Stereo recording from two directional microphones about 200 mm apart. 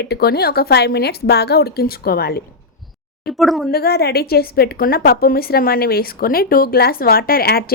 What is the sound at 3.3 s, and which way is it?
Speech, centre (ahead or behind).